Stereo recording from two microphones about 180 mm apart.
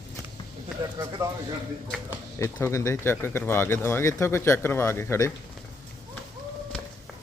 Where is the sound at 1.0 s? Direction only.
20° right (ahead or behind).